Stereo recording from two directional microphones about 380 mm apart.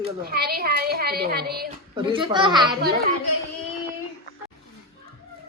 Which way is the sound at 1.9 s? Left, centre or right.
Centre.